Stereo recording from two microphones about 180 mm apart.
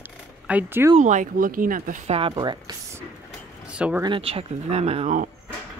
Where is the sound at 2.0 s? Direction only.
30° right (ahead or behind).